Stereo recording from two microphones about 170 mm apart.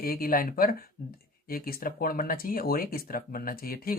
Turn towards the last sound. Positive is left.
turn(degrees=60)  # may be behind; listen again after turning